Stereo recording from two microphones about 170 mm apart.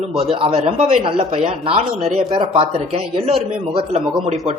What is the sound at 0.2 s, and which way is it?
Speech, 30° right (ahead or behind).